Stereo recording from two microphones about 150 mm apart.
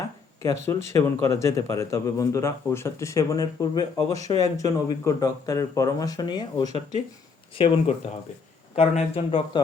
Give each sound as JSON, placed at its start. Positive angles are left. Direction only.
{"t": 0.4, "sound": "speech", "side_deg": 20}
{"t": 7.5, "sound": "speech", "side_deg": 40}